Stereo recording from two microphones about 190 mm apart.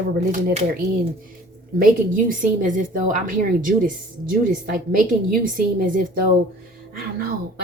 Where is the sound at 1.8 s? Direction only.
45° right (ahead or behind).